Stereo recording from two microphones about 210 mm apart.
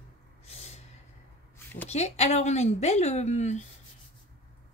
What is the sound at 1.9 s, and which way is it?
Speech, 30° left (ahead or behind).